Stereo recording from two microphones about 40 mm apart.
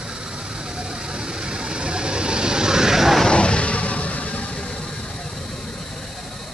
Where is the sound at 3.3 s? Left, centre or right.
Left.